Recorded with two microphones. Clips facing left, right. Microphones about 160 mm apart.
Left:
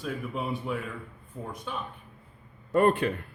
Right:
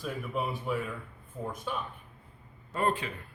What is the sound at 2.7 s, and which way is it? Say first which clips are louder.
Speech: left 8 dB; 60° left (ahead or behind).